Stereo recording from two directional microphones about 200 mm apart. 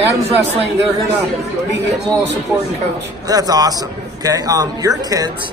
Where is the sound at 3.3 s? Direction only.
20° right (ahead or behind).